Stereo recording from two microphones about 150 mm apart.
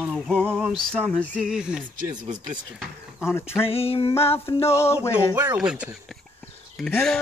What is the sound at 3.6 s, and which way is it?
Female singing, 40° left (ahead or behind).